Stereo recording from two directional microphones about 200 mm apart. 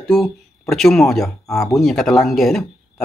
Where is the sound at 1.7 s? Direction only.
Centre (ahead or behind).